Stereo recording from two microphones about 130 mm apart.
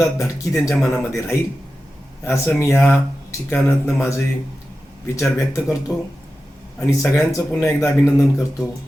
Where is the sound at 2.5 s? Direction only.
20° left (ahead or behind).